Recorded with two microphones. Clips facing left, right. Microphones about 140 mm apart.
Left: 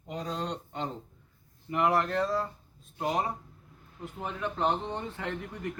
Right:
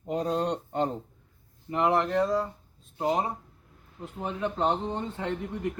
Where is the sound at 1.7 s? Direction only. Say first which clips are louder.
Right 2 dB; 25° right (ahead or behind).